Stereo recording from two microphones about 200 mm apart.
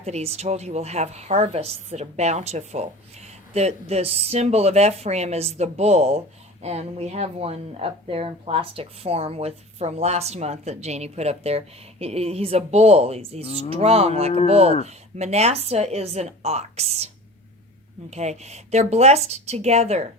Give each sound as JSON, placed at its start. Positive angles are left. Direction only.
{"t": 0.0, "sound": "a woman's voice", "side_deg": -30}
{"t": 18.1, "sound": "a woman's voice", "side_deg": -35}